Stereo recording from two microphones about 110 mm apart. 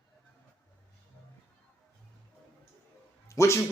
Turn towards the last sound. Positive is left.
turn(degrees=25)  # may be behind; listen again after turning